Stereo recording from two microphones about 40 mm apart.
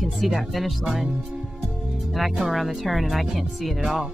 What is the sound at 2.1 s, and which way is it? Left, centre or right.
Speech, centre.